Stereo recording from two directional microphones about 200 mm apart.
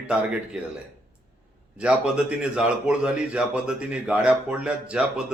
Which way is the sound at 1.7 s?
5° right (ahead or behind).